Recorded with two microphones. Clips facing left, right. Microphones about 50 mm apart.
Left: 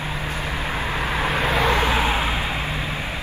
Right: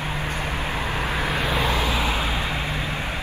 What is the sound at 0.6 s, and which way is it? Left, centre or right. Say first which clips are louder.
Vehicle: left 3 dB; left.